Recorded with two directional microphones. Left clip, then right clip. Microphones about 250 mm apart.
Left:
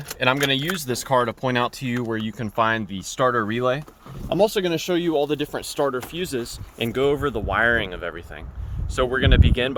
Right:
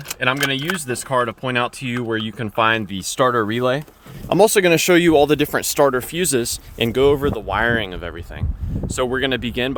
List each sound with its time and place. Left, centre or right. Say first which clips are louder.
0.2 s speech: right 1 dB; centre
1.9 s speech: right 4 dB; centre
3.2 s speech: right 3 dB; centre
4.3 s speech: right 7 dB; right; by 9.7 s centre